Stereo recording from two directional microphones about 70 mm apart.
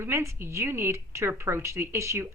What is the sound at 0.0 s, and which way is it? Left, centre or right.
A woman's voice, right.